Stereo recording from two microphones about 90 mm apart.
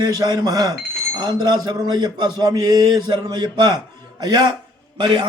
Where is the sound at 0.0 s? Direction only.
45° right (ahead or behind).